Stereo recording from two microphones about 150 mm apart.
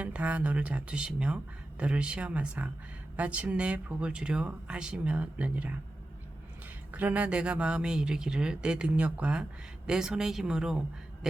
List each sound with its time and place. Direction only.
0.0 s speech: 10° right (ahead or behind)
6.9 s speech: 10° right (ahead or behind)